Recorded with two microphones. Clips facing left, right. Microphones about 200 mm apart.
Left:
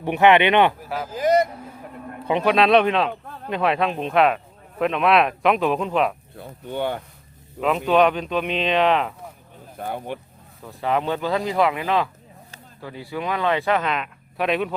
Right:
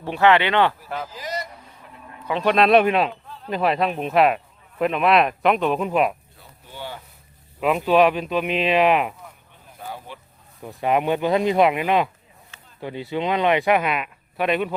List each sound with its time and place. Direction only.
0.0 s speech: 20° left (ahead or behind)
0.9 s speech: 5° left (ahead or behind)
1.1 s a sound: 55° left (ahead or behind)
2.4 s speech: centre (ahead or behind)
3.1 s a sound: 55° left (ahead or behind)
3.5 s speech: centre (ahead or behind)
6.3 s speech: 60° left (ahead or behind)
7.6 s speech: 5° right (ahead or behind)
9.7 s speech: 55° left (ahead or behind)
10.6 s speech: 15° right (ahead or behind); by 14.7 s centre (ahead or behind)